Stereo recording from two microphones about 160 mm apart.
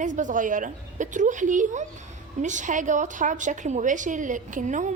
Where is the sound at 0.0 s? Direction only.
50° right (ahead or behind).